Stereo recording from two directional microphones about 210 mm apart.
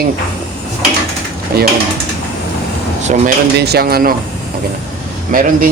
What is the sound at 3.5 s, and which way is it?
Speech, 50° right (ahead or behind).